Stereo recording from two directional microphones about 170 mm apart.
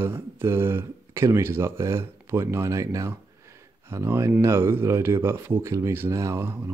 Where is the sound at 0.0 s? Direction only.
15° right (ahead or behind).